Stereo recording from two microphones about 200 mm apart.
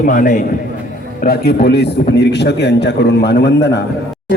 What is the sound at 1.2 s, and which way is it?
A man's voice, 50° left (ahead or behind).